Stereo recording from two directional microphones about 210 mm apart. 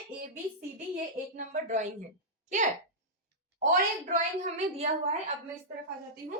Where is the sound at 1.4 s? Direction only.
35° right (ahead or behind).